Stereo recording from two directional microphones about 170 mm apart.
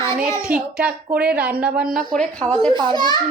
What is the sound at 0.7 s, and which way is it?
A woman's voice, 5° right (ahead or behind).